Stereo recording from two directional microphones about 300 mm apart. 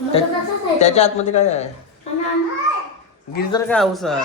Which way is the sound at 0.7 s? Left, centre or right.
Left.